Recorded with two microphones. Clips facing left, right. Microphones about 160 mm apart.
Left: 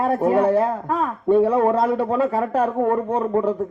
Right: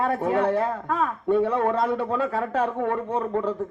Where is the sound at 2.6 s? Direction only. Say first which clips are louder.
Left 6 dB; 40° left (ahead or behind).